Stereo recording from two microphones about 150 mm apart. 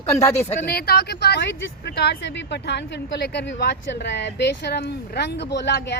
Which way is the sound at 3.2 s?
90° left.